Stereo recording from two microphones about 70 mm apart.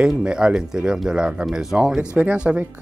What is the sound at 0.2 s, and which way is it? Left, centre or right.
Speech, centre.